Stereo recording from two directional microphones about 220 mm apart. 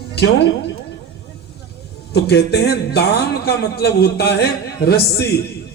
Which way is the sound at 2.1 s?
45° left (ahead or behind).